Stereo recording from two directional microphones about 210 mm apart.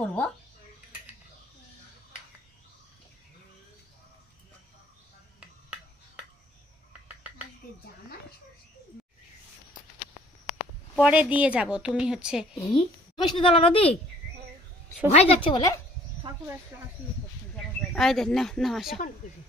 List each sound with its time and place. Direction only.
0.0 s speech: 5° left (ahead or behind)
11.0 s a woman's voice: 5° right (ahead or behind)
12.7 s a woman's voice: 20° left (ahead or behind)
15.0 s a woman's voice: 30° left (ahead or behind)
17.9 s a woman's voice: centre (ahead or behind)